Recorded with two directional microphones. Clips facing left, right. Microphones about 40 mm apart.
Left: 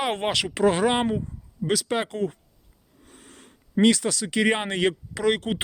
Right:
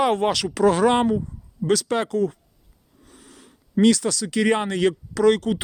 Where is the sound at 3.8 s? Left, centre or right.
Left.